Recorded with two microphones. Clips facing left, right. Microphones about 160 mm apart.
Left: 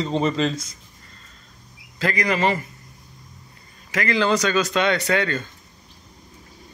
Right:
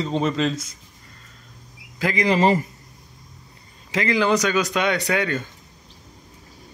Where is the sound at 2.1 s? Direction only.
25° right (ahead or behind).